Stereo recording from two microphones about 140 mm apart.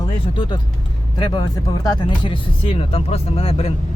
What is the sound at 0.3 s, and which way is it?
Speech, 35° left (ahead or behind).